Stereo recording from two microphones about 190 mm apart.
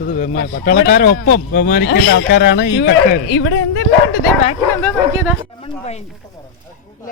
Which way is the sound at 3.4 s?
90° left.